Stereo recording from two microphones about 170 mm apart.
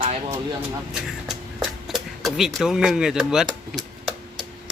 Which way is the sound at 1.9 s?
Centre (ahead or behind).